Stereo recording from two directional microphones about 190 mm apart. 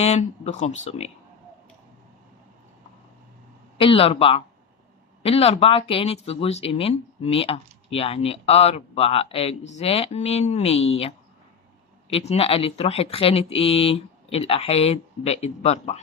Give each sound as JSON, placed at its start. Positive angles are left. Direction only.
{"t": 0.0, "sound": "speech", "side_deg": 35}
{"t": 3.8, "sound": "speech", "side_deg": 30}
{"t": 12.1, "sound": "speech", "side_deg": 35}